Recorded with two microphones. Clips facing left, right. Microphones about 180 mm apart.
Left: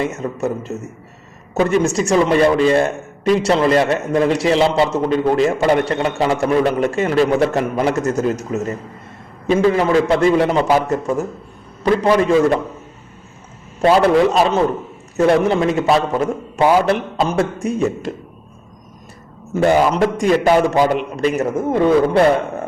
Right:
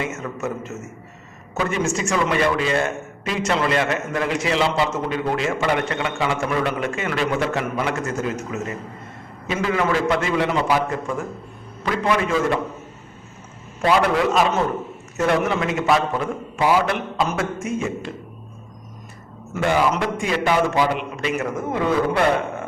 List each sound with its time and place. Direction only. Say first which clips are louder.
0.0 s a man's voice: left 6 dB; 35° left (ahead or behind)
13.8 s a man's voice: left 6 dB; 35° left (ahead or behind)
19.6 s a man's voice: left 6 dB; 40° left (ahead or behind)